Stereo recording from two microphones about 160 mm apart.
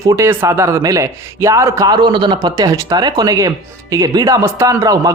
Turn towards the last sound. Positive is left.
turn(degrees=-20)  # may be behind; listen again after turning